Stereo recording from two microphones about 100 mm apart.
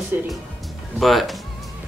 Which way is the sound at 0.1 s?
20° right (ahead or behind).